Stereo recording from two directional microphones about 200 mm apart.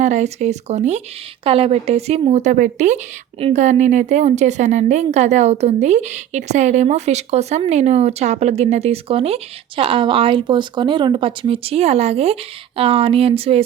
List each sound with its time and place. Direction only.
0.0 s a woman's voice: 35° right (ahead or behind)